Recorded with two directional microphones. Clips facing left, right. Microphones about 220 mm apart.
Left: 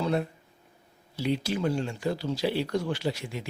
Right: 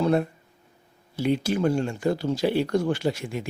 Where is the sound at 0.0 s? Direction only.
50° right (ahead or behind).